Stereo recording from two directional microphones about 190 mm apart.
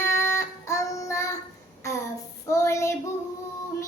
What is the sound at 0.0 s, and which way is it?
Child singing, 15° left (ahead or behind).